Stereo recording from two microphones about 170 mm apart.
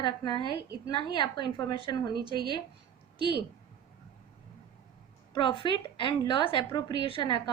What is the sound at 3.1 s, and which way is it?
Speech, 80° right.